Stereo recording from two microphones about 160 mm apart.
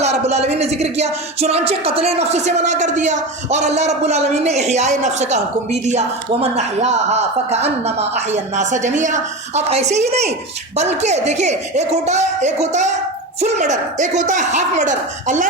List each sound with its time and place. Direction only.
0.0 s speech: 45° right (ahead or behind)
6.6 s speech: 45° right (ahead or behind)